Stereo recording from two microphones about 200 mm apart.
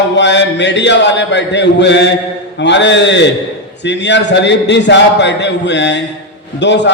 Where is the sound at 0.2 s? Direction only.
60° left (ahead or behind).